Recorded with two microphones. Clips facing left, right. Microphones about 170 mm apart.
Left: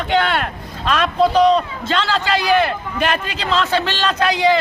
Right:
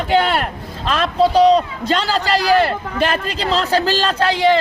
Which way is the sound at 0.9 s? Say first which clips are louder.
Right 1 dB; 30° right (ahead or behind).